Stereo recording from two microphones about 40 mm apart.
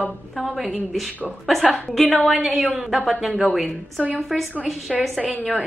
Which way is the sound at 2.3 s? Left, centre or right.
Centre.